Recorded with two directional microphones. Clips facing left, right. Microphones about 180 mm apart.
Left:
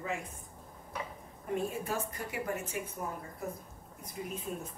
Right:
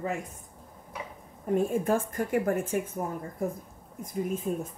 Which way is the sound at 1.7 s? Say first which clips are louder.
Right 10 dB; 50° right (ahead or behind).